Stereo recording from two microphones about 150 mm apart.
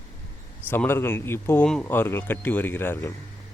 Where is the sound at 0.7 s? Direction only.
15° left (ahead or behind).